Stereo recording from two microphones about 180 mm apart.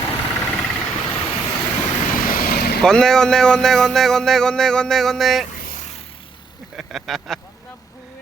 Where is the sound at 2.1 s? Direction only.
50° left (ahead or behind).